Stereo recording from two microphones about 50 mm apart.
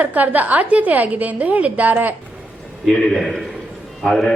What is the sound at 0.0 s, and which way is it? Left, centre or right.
A woman's voice, right.